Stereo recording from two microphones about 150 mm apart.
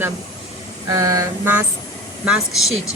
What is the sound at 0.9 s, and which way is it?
Mantra, 20° right (ahead or behind).